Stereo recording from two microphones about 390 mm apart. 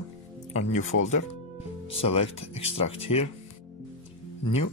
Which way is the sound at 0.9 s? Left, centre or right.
Left.